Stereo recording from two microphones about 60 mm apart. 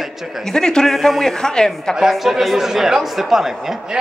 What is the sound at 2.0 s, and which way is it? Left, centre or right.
Speech, centre.